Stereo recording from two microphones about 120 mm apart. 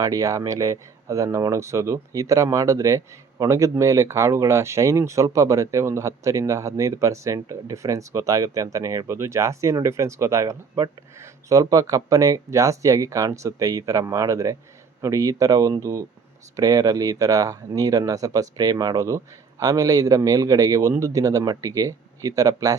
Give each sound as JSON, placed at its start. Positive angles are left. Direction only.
{"t": 0.0, "sound": "speech", "side_deg": -30}